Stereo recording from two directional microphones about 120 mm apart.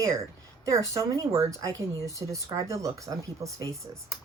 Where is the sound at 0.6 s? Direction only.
30° right (ahead or behind).